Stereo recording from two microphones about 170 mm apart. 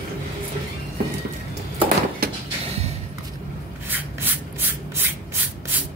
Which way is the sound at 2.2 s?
60° right (ahead or behind).